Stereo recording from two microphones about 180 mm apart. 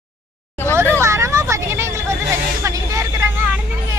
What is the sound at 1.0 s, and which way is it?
Vehicle, 15° right (ahead or behind).